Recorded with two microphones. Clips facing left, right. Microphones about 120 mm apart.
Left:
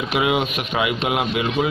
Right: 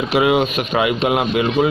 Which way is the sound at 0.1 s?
40° right (ahead or behind).